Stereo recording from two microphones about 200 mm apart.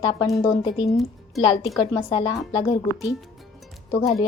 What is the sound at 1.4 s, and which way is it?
Speech, 30° left (ahead or behind).